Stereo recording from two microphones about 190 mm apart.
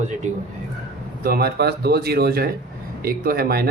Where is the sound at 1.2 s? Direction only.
55° right (ahead or behind).